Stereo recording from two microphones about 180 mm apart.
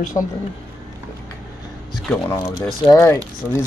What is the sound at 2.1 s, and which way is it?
Speech, 15° left (ahead or behind).